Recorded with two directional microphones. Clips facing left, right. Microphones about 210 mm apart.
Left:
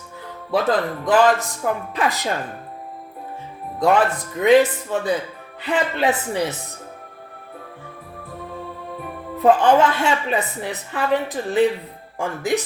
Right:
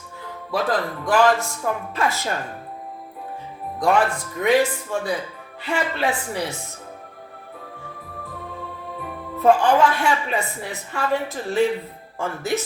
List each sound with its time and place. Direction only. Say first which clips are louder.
0.5 s a woman's voice: left 3 dB; 20° left (ahead or behind)
3.8 s a woman's voice: left 2 dB; 20° left (ahead or behind)
9.4 s a woman's voice: left 2 dB; 20° left (ahead or behind)